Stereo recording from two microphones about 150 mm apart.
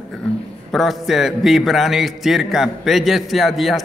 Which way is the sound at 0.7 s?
Centre (ahead or behind).